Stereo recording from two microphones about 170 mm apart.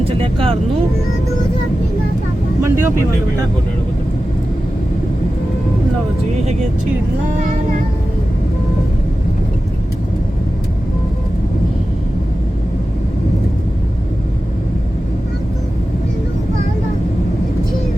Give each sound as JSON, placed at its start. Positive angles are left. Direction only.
{"t": 0.0, "sound": "speech", "side_deg": -35}
{"t": 2.6, "sound": "vehicle", "side_deg": -15}